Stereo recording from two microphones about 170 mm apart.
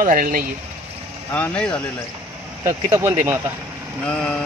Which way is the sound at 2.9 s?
15° right (ahead or behind).